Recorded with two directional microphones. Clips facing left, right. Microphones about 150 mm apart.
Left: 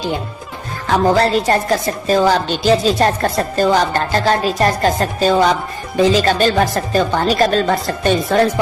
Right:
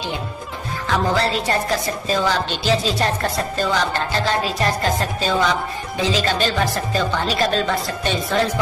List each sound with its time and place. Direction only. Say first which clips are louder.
0.9 s a woman's voice: left 6 dB; 45° left (ahead or behind)